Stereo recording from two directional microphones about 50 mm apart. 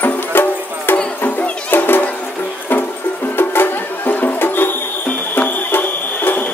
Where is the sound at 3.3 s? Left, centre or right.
Left.